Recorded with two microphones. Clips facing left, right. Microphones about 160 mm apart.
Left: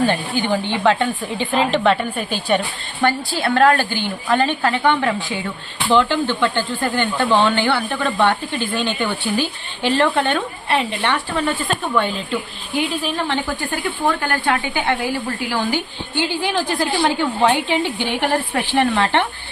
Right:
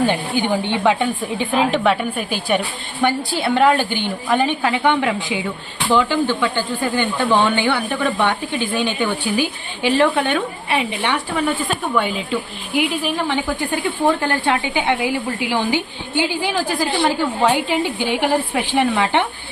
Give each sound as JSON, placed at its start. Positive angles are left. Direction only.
{"t": 0.0, "sound": "a woman's voice", "side_deg": -15}